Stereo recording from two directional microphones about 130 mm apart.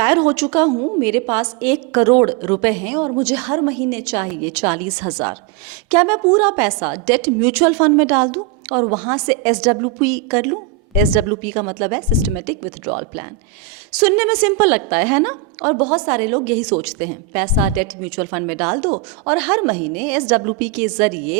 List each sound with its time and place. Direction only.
0.0 s a woman's voice: 10° right (ahead or behind)
0.7 s a woman's voice: 20° right (ahead or behind)
1.0 s a woman's voice: 10° right (ahead or behind)